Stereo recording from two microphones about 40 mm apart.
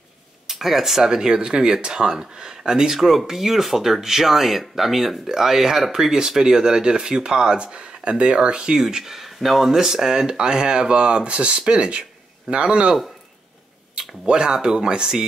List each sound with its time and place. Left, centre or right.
0.5 s speech: centre; by 8.8 s right
8.8 s speech: centre; by 12.9 s right
13.9 s speech: right